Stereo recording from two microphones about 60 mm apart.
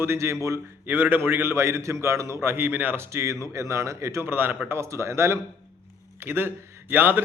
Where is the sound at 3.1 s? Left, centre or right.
Right.